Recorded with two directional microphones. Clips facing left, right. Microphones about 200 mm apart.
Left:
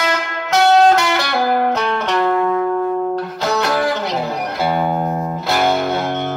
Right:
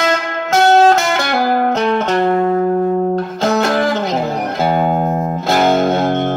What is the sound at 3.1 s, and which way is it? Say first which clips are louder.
Music: right 4 dB; 45° right (ahead or behind).